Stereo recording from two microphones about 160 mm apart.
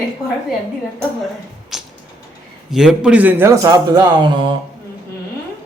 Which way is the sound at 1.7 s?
Centre (ahead or behind).